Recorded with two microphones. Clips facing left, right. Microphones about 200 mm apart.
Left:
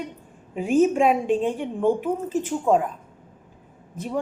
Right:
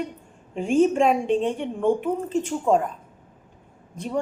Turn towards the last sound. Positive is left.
turn(degrees=5)  # may be behind; listen again after turning